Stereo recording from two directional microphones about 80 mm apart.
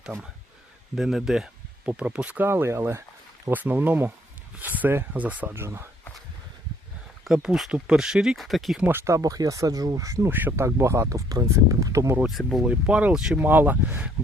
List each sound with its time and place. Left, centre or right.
0.9 s speech: centre
1.8 s speech: centre
2.5 s speech: right
3.5 s speech: right
7.4 s speech: centre
8.9 s speech: right
9.1 s speech: right
10.2 s speech: right
10.8 s speech: right
12.3 s speech: centre
12.6 s speech: centre